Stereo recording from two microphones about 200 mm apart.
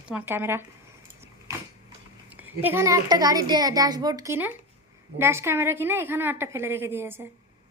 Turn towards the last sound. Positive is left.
turn(degrees=-10)  # may be behind; listen again after turning